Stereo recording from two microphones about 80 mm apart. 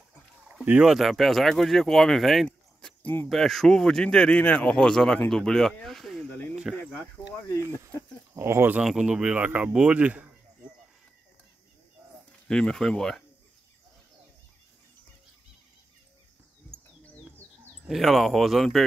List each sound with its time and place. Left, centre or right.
0.8 s speech: centre
2.4 s a sound: centre
3.3 s speech: centre
8.4 s speech: right
8.8 s speech: centre
12.4 s speech: centre
17.8 s speech: centre